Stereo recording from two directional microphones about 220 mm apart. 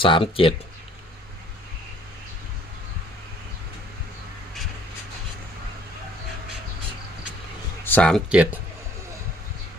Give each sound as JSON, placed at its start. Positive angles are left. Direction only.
{"t": 0.0, "sound": "speech", "side_deg": 25}
{"t": 7.9, "sound": "speech", "side_deg": 5}